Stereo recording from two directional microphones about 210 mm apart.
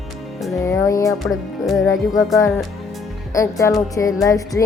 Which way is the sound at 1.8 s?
15° left (ahead or behind).